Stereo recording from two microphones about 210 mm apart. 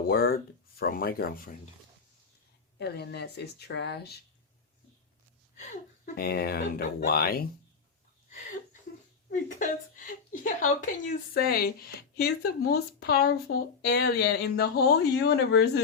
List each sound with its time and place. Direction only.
0.1 s speech: 45° left (ahead or behind)
2.7 s speech: 50° left (ahead or behind)
6.1 s speech: 50° left (ahead or behind)
9.3 s a woman's voice: 40° left (ahead or behind)